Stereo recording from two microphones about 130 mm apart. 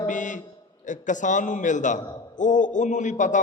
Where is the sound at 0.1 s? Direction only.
75° left (ahead or behind).